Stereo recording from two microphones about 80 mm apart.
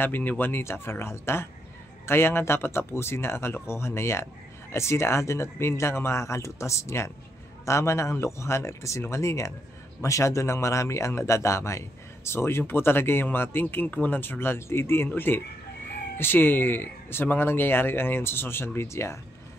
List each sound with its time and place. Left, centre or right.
0.0 s speech: left